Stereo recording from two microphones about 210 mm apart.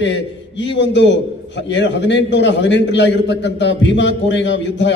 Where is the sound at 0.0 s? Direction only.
60° left (ahead or behind).